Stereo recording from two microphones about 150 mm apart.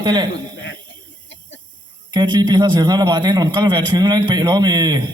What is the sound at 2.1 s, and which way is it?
Speech, 30° right (ahead or behind).